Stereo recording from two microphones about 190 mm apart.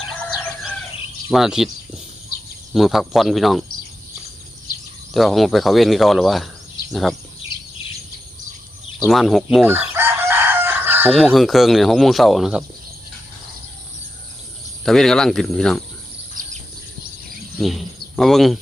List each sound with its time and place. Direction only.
1.3 s speech: centre (ahead or behind)
2.7 s speech: centre (ahead or behind)
5.1 s speech: centre (ahead or behind)
9.0 s speech: centre (ahead or behind)
9.6 s chicken: 10° right (ahead or behind)
11.1 s speech: 5° left (ahead or behind)
14.8 s speech: centre (ahead or behind)
16.4 s bird: 45° right (ahead or behind)
17.6 s speech: centre (ahead or behind)